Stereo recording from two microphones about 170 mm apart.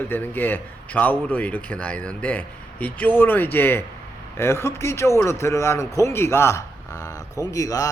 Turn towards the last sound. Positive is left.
turn(degrees=20)  # may be behind; listen again after turning